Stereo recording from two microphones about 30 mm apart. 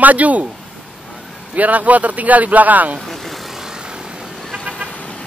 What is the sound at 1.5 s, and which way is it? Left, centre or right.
Speech, right.